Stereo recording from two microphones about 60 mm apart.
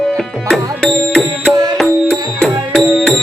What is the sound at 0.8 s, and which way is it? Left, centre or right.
Music, centre.